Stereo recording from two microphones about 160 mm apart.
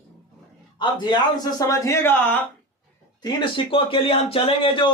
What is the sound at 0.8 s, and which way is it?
A man's voice, 25° left (ahead or behind).